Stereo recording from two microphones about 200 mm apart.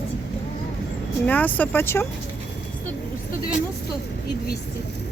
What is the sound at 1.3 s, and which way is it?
Speech, 10° left (ahead or behind).